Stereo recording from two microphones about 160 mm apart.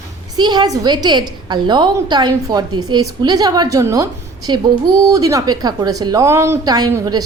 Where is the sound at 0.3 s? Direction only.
25° right (ahead or behind).